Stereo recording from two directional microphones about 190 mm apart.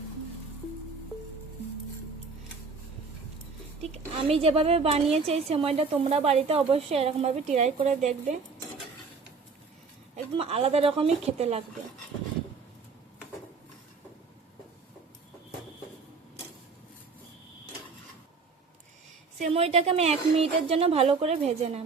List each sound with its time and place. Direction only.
3.8 s a woman's voice: 30° right (ahead or behind)
10.3 s a woman's voice: 30° right (ahead or behind)
19.4 s a woman's voice: 35° right (ahead or behind)